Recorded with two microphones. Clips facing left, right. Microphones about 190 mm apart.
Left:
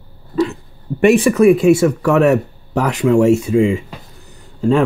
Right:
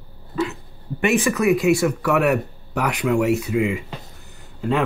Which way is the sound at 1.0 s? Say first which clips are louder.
Left 8 dB; 30° left (ahead or behind).